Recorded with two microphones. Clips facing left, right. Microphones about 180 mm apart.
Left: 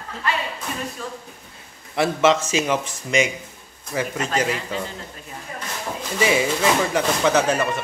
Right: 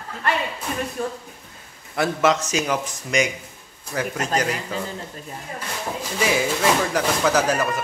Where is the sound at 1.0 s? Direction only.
50° right (ahead or behind).